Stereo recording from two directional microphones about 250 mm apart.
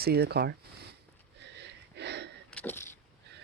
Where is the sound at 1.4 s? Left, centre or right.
Right.